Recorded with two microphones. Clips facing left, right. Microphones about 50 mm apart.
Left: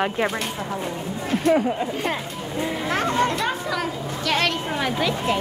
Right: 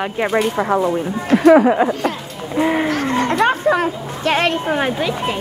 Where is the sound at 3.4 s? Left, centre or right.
Right.